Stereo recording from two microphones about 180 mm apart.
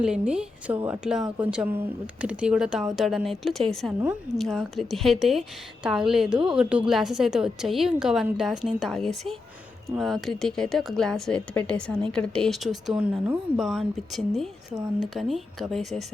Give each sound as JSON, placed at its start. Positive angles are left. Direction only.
{"t": 0.0, "sound": "speech", "side_deg": -5}
{"t": 14.7, "sound": "speech", "side_deg": -20}
{"t": 15.1, "sound": "speech", "side_deg": 0}